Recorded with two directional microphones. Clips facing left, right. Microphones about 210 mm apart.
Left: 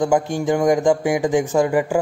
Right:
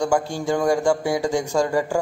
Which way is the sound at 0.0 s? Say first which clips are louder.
Left 3 dB; 20° left (ahead or behind).